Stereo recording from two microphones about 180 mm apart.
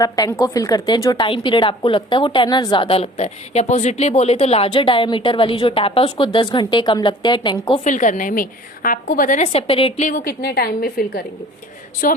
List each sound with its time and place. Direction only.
0.0 s a woman's voice: 20° left (ahead or behind)
7.9 s a woman's voice: 45° left (ahead or behind)
10.1 s a woman's voice: 50° left (ahead or behind)